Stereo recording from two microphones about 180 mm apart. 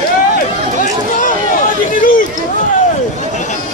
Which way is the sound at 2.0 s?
50° left (ahead or behind).